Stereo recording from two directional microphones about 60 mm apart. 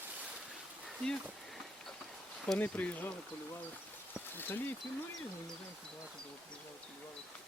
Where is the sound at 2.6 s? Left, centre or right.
Left.